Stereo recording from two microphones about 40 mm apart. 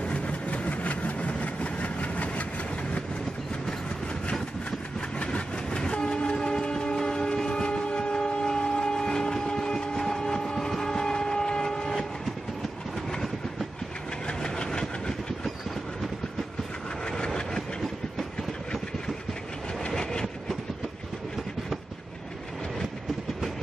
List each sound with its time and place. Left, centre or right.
0.0 s vehicle: left
5.2 s train: left
14.2 s vehicle: centre
17.0 s train: centre
19.9 s train: centre